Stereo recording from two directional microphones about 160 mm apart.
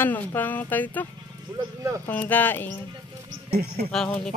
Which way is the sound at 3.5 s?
80° right.